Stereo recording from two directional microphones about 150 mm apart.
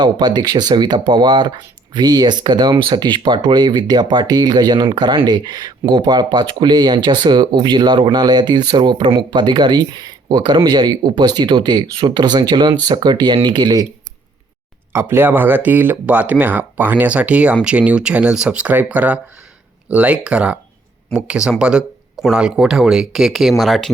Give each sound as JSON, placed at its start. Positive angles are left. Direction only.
{"t": 0.0, "sound": "speech", "side_deg": -30}
{"t": 14.9, "sound": "speech", "side_deg": -15}